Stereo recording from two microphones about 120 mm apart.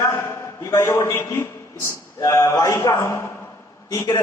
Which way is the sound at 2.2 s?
25° left (ahead or behind).